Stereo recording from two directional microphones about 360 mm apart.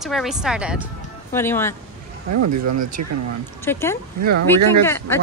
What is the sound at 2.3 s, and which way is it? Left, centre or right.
Speech, right.